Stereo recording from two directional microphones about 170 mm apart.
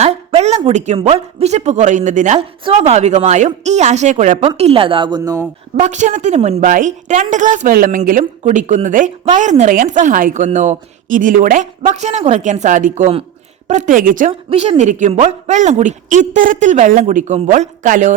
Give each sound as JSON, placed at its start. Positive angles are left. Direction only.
{"t": 0.0, "sound": "a woman's voice", "side_deg": -40}
{"t": 5.7, "sound": "a woman's voice", "side_deg": -45}
{"t": 6.7, "sound": "a woman's voice", "side_deg": -50}
{"t": 14.5, "sound": "a woman's voice", "side_deg": -40}